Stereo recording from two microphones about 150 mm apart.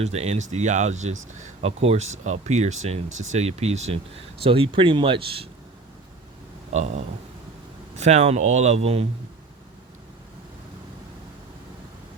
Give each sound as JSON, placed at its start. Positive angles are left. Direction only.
{"t": 0.0, "sound": "speech", "side_deg": -45}
{"t": 6.7, "sound": "speech", "side_deg": -50}